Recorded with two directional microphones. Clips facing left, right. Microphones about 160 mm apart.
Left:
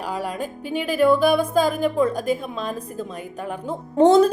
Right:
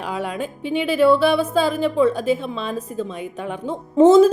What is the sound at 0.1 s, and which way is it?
Speech, 40° left (ahead or behind).